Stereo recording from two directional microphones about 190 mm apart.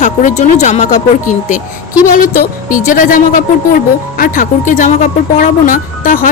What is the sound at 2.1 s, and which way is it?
Speech, 45° left (ahead or behind).